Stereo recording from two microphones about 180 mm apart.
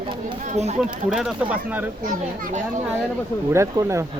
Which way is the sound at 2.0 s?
50° right (ahead or behind).